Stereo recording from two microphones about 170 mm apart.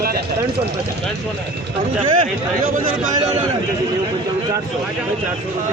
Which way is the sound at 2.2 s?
55° right (ahead or behind).